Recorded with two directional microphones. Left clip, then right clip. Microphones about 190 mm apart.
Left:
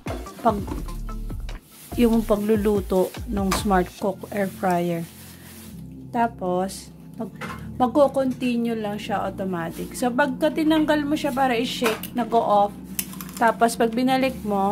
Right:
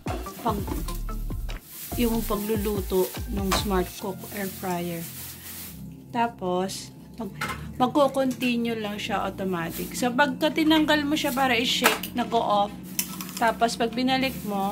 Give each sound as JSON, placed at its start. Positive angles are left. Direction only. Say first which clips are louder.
{"t": 0.4, "sound": "speech", "louder": "left 7 dB", "side_deg": 40}
{"t": 2.0, "sound": "speech", "louder": "left 6 dB", "side_deg": 40}
{"t": 6.1, "sound": "a woman's voice", "louder": "left 3 dB", "side_deg": 30}